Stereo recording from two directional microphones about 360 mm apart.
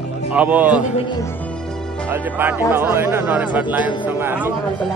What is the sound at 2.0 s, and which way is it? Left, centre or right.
A man's voice, centre.